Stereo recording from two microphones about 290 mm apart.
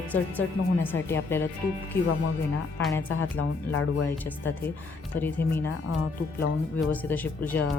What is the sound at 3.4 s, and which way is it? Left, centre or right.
Speech, left.